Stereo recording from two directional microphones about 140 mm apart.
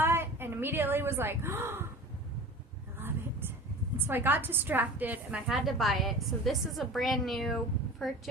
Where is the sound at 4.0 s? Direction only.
15° right (ahead or behind).